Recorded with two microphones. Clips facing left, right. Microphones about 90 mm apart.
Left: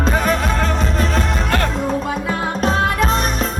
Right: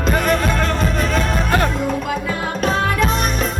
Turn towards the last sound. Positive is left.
turn(degrees=30)  # may be behind; listen again after turning